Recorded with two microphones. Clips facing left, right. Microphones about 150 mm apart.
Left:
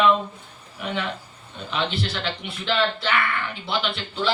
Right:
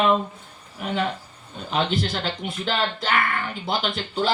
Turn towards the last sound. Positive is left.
turn(degrees=-45)  # may be behind; listen again after turning